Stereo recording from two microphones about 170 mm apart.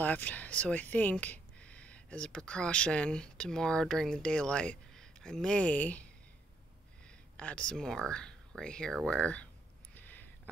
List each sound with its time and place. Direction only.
0.0 s speech: 10° left (ahead or behind)
7.3 s speech: 5° left (ahead or behind)
9.9 s a sound: 10° left (ahead or behind)